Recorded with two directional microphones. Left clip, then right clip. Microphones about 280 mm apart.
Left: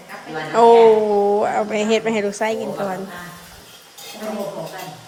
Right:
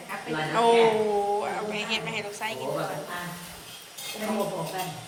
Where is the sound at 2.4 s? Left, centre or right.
Left.